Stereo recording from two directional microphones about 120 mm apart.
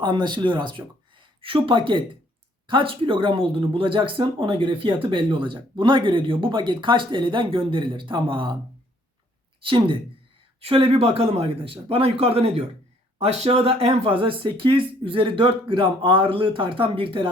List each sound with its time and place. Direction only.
0.0 s speech: 40° right (ahead or behind)
9.6 s speech: 45° right (ahead or behind)
10.6 s speech: 55° right (ahead or behind)